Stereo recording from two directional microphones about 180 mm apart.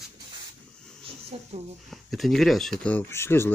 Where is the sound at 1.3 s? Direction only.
35° right (ahead or behind).